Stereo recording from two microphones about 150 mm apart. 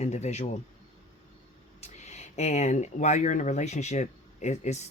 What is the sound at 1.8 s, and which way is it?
Speech, 50° left (ahead or behind).